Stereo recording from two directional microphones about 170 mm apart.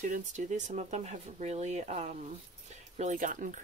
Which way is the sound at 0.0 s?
45° right (ahead or behind).